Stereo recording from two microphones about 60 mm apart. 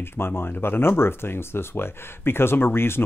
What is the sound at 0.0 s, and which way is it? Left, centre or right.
Speech, left.